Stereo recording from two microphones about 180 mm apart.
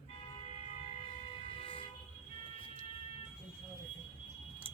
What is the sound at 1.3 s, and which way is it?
Vehicle, 25° left (ahead or behind).